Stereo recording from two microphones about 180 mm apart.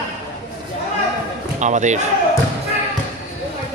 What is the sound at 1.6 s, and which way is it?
Speech, 40° right (ahead or behind).